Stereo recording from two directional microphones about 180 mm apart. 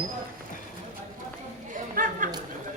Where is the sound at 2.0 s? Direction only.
50° right (ahead or behind).